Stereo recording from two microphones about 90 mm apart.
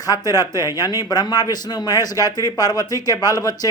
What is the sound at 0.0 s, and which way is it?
Speech, 45° left (ahead or behind).